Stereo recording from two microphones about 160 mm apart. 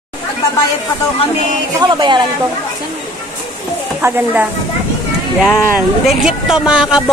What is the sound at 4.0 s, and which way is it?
Speech, 10° right (ahead or behind).